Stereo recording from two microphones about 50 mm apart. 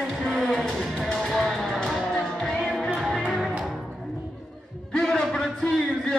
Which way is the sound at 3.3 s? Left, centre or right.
Centre.